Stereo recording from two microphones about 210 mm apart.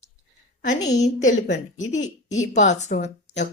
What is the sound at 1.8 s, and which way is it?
A woman's voice, 35° left (ahead or behind).